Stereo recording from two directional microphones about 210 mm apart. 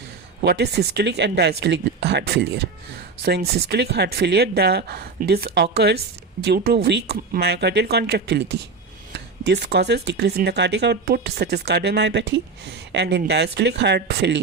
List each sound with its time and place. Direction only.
0.4 s speech: 50° right (ahead or behind)